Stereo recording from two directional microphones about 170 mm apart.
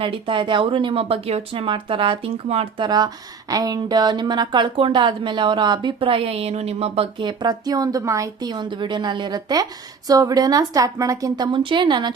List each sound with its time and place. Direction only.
0.0 s a woman's voice: 30° right (ahead or behind)